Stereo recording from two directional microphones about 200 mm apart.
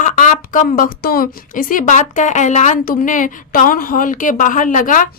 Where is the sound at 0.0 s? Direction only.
40° left (ahead or behind).